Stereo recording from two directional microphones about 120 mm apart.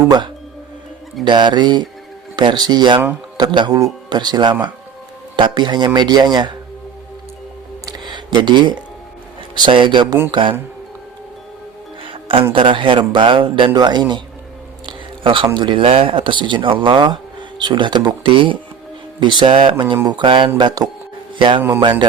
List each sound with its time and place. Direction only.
1.2 s speech: 40° right (ahead or behind)
7.9 s a sound: 40° right (ahead or behind)
9.6 s speech: 40° right (ahead or behind)
12.0 s music: 50° right (ahead or behind)
12.5 s speech: 45° right (ahead or behind)
14.8 s a sound: 45° right (ahead or behind)
15.5 s speech: 40° right (ahead or behind)